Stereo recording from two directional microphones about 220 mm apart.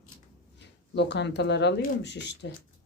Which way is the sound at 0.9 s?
50° left (ahead or behind).